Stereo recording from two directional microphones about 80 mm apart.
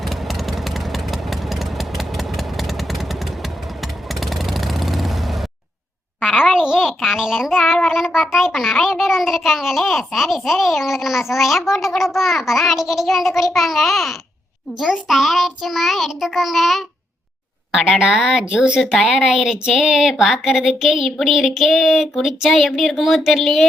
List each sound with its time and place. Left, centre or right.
0.0 s vehicle: centre
6.1 s a sound: centre
7.9 s a child's voice: centre
18.8 s a child's voice: centre